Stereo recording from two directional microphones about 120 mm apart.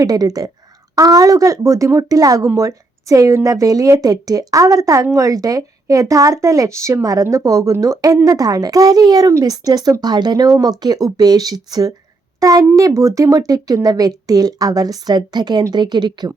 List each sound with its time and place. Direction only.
0.0 s a woman's voice: 30° right (ahead or behind)